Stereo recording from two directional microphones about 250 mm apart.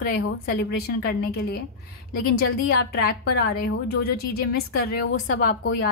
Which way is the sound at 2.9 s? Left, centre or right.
Left.